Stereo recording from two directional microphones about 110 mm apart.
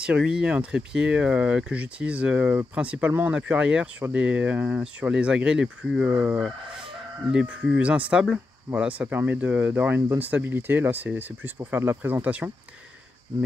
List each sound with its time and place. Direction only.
0.0 s speech: 10° right (ahead or behind)